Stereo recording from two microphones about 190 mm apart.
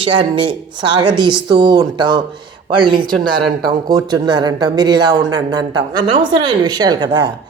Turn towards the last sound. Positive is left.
turn(degrees=-20)  # may be behind; listen again after turning